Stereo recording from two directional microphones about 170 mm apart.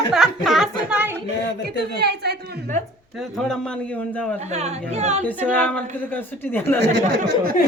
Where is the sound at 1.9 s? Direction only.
70° right (ahead or behind).